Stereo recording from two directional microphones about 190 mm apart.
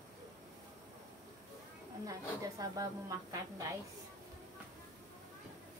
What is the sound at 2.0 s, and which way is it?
A woman's voice, 15° right (ahead or behind).